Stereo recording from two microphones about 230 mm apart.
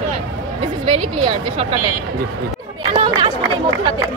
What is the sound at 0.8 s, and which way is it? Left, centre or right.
Speech, right.